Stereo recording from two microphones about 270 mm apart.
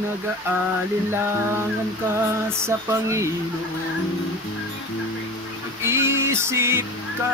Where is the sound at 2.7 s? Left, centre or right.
Centre.